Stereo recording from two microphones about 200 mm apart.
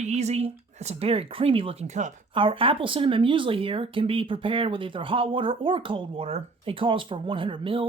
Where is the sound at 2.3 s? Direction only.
25° right (ahead or behind).